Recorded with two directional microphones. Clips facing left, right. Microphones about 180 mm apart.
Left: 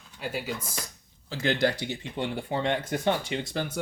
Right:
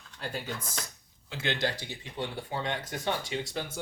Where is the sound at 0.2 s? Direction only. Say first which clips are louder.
Left 4 dB; 5° left (ahead or behind).